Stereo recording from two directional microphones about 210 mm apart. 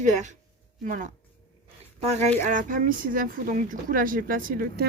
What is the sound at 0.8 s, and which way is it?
Speech, 40° right (ahead or behind).